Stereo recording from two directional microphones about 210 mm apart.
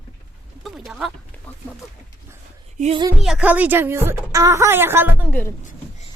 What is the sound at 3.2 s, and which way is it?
A woman's voice, 5° right (ahead or behind).